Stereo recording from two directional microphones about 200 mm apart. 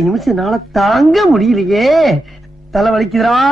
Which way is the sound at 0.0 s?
Centre (ahead or behind).